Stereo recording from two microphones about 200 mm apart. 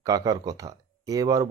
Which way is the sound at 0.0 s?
20° right (ahead or behind).